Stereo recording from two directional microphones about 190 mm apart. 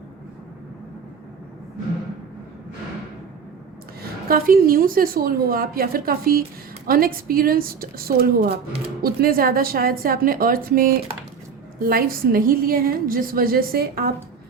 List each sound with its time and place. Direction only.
4.3 s a woman's voice: 50° right (ahead or behind)